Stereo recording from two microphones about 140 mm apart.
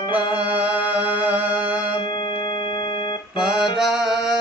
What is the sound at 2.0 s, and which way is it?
Music, 35° left (ahead or behind).